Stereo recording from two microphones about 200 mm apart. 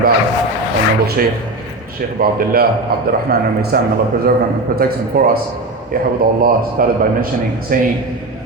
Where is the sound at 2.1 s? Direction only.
50° right (ahead or behind).